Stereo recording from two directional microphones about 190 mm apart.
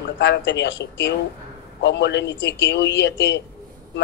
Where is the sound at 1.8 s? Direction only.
65° left (ahead or behind).